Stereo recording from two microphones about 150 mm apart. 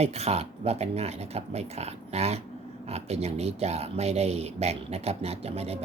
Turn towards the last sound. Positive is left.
turn(degrees=-45)  # may be behind; listen again after turning